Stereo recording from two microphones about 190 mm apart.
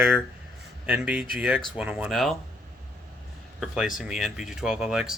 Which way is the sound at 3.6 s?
Centre (ahead or behind).